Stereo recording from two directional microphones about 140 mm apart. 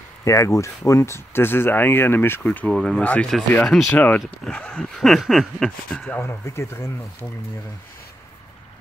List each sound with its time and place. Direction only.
0.2 s speech: 20° left (ahead or behind)